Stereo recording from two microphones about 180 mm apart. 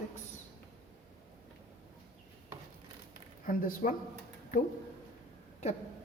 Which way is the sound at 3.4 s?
50° left (ahead or behind).